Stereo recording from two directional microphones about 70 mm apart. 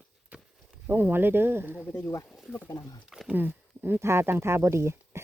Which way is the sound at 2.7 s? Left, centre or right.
Left.